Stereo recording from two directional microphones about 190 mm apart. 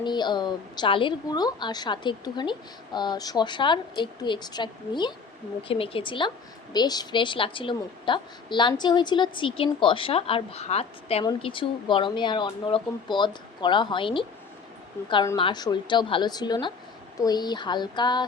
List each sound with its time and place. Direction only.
0.0 s a woman's voice: 25° left (ahead or behind)